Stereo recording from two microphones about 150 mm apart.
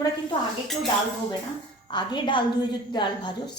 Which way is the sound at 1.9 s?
30° left (ahead or behind).